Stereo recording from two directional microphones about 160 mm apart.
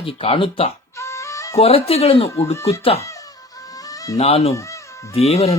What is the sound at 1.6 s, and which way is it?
Speech, 40° left (ahead or behind).